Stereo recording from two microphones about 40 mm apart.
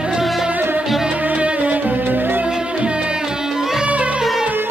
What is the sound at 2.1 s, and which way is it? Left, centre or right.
Music, right.